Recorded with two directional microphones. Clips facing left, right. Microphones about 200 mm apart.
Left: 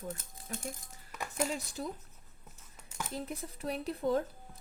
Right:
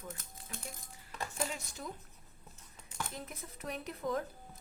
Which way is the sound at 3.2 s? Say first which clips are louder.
Left 6 dB; 30° left (ahead or behind).